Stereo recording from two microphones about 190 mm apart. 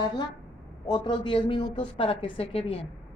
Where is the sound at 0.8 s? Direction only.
20° left (ahead or behind).